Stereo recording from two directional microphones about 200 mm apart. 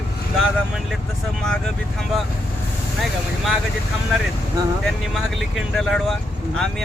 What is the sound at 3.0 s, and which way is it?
Speech, centre (ahead or behind).